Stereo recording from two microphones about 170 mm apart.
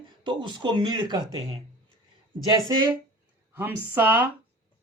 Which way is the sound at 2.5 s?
25° right (ahead or behind).